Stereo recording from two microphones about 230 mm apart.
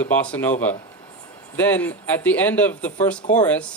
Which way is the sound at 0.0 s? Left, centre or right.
Centre.